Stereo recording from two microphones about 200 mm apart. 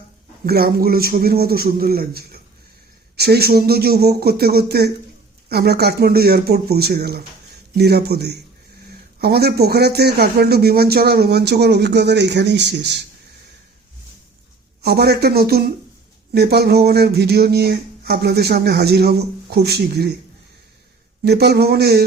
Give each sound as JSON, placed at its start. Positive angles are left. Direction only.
{"t": 0.4, "sound": "speech", "side_deg": -50}
{"t": 14.8, "sound": "speech", "side_deg": -55}
{"t": 21.2, "sound": "speech", "side_deg": -55}